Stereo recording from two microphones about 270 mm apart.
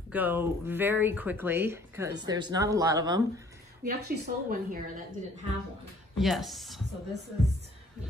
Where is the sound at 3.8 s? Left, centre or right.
Right.